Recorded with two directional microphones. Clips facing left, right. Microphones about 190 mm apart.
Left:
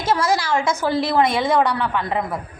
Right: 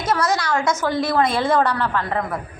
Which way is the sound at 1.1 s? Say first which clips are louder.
Even; 20° left (ahead or behind).